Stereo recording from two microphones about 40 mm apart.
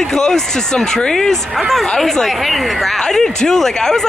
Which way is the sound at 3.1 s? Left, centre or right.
Centre.